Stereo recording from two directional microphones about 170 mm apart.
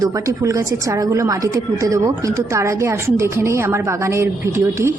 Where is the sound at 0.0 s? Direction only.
20° right (ahead or behind).